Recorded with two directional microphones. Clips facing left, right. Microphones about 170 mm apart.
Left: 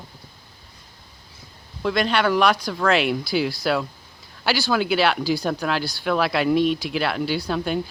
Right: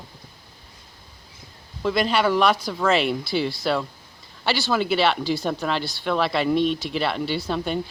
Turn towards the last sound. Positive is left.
turn(degrees=0)  # may be behind; listen again after turning